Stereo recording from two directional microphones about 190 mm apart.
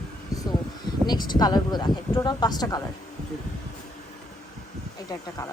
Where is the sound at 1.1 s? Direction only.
20° left (ahead or behind).